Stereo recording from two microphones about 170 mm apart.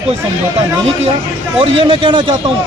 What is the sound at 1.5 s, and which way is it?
Speech, 35° right (ahead or behind).